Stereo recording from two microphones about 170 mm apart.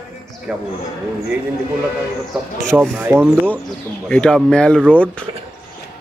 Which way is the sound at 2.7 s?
15° right (ahead or behind).